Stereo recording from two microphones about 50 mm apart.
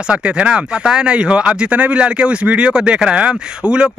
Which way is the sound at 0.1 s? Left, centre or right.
Right.